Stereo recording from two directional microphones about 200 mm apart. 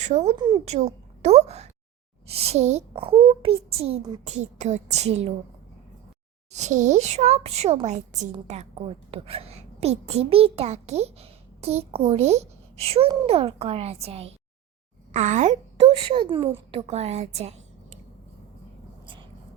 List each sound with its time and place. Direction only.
0.0 s speech: 35° right (ahead or behind)
0.3 s a child's voice: 20° right (ahead or behind)
0.7 s a child's voice: 35° right (ahead or behind)
4.2 s speech: 35° right (ahead or behind)
6.5 s a woman's voice: 35° right (ahead or behind)